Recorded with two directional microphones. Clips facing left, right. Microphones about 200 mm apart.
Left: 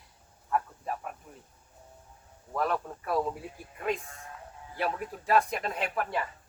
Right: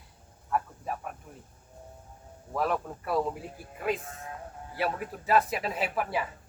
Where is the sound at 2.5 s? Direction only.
5° right (ahead or behind).